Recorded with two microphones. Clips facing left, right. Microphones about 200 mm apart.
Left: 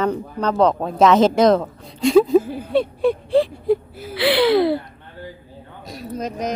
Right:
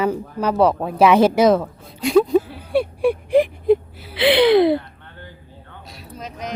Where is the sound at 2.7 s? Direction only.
10° right (ahead or behind).